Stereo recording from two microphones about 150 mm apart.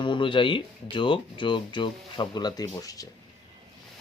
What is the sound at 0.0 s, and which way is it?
Speech, 35° left (ahead or behind).